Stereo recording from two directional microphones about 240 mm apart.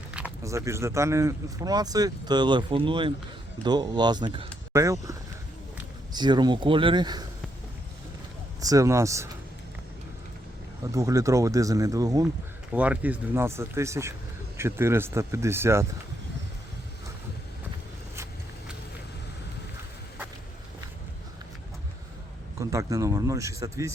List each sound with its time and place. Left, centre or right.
0.1 s speech: centre
6.1 s speech: centre
8.6 s speech: centre
10.9 s speech: centre
22.5 s speech: centre